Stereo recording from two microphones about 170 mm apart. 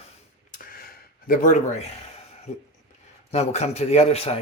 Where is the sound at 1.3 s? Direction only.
50° left (ahead or behind).